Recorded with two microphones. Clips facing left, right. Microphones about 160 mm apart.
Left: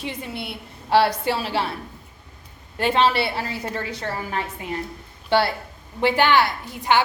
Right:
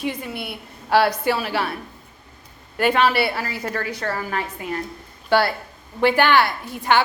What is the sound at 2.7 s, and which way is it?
A woman's voice, 25° left (ahead or behind).